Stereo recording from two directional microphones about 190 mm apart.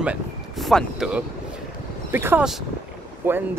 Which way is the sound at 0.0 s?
5° right (ahead or behind).